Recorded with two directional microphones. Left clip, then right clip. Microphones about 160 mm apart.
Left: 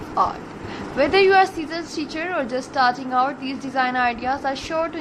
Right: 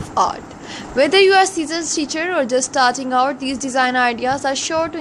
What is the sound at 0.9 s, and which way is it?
A woman's voice, 45° right (ahead or behind).